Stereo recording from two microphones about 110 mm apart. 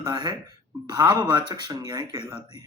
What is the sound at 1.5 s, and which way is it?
Speech, 45° right (ahead or behind).